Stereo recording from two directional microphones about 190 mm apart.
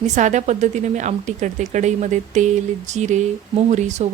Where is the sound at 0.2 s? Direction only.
40° right (ahead or behind).